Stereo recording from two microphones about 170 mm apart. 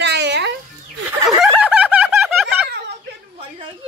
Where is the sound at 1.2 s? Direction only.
Centre (ahead or behind).